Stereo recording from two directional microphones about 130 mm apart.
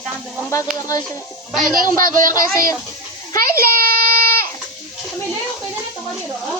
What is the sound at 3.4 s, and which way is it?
A child's voice, 90° right.